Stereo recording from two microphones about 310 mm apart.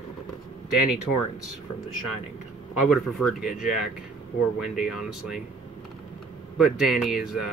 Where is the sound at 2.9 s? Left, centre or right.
Centre.